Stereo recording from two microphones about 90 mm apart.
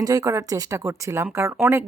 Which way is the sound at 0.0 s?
40° right (ahead or behind).